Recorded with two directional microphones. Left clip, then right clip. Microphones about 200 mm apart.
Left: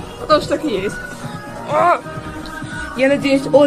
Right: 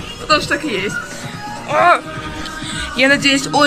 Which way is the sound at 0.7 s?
5° left (ahead or behind).